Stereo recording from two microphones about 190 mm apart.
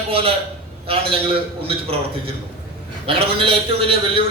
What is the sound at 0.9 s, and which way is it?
A man's voice, 30° right (ahead or behind).